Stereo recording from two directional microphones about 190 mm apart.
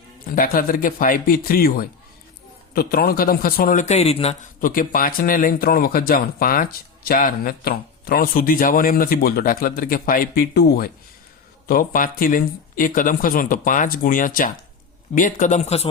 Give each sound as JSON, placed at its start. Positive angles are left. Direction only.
{"t": 0.3, "sound": "speech", "side_deg": 50}
{"t": 4.6, "sound": "speech", "side_deg": 45}